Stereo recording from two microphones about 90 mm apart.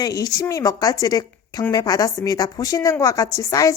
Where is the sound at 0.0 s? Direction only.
45° left (ahead or behind).